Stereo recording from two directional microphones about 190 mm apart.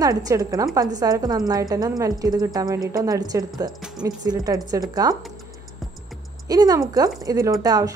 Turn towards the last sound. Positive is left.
turn(degrees=-20)  # may be behind; listen again after turning